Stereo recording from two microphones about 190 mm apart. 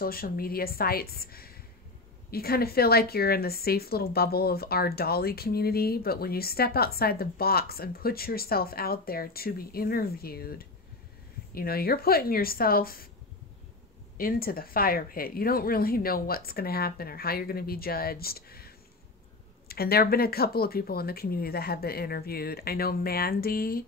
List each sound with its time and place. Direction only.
0.0 s a woman's voice: 50° left (ahead or behind)
14.1 s a woman's voice: 50° left (ahead or behind)
19.7 s a woman's voice: 55° left (ahead or behind)